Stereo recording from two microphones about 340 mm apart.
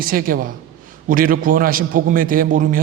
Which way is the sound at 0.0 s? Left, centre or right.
Right.